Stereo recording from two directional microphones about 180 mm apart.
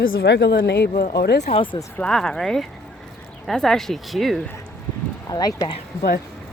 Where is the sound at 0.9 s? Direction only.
55° left (ahead or behind).